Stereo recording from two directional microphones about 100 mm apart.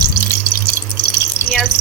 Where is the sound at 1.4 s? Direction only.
30° left (ahead or behind).